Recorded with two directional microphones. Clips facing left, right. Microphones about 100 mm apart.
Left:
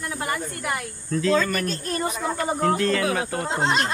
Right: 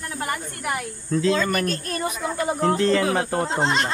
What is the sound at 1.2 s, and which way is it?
Speech, 25° right (ahead or behind).